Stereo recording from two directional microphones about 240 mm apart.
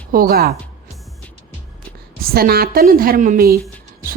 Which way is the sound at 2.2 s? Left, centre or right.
Right.